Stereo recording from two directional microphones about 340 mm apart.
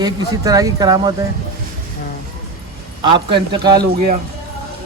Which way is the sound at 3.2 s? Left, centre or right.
Centre.